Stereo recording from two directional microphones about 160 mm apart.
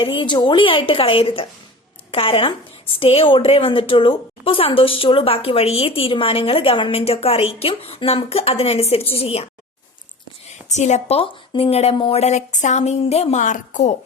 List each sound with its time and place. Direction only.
0.0 s a woman's voice: 30° left (ahead or behind)
10.7 s a woman's voice: 45° left (ahead or behind)